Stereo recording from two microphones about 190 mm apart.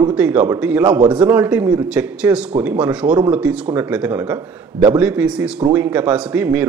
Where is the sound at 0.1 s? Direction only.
5° right (ahead or behind).